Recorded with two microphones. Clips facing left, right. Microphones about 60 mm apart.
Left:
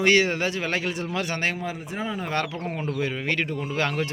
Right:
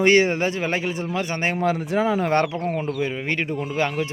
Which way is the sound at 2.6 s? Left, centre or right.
Centre.